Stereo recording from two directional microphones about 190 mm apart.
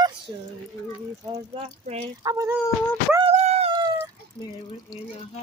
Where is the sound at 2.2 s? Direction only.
15° right (ahead or behind).